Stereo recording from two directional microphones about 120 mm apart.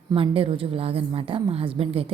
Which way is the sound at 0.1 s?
50° right (ahead or behind).